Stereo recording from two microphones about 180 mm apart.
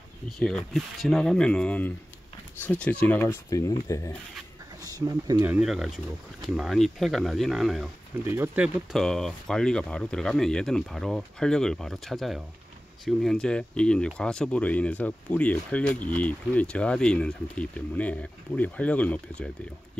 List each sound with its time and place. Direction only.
0.4 s speech: 5° left (ahead or behind)
4.8 s speech: 20° right (ahead or behind)
5.4 s speech: 5° right (ahead or behind)
8.2 s speech: 15° right (ahead or behind)
8.9 s speech: centre (ahead or behind)